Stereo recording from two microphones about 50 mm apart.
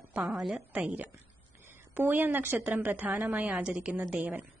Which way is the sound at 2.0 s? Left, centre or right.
Right.